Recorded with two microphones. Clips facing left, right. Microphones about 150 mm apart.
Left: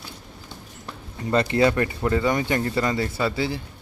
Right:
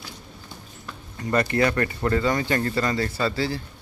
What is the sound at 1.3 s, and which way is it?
Speech, 20° left (ahead or behind).